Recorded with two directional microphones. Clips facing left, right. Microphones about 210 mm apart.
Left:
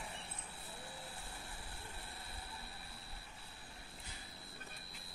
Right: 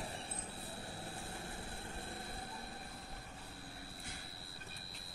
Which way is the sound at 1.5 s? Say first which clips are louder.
Right 6 dB; 50° right (ahead or behind).